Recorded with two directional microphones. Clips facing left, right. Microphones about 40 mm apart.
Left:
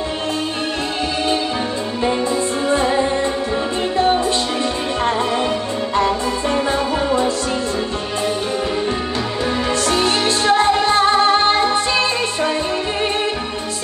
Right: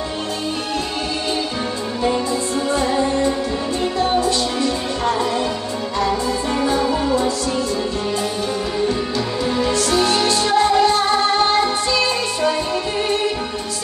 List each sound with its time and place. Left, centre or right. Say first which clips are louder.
2.7 s music: left 2 dB; left
9.7 s music: even; left